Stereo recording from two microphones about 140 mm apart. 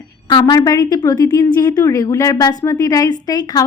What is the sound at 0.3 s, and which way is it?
A woman's voice, 30° left (ahead or behind).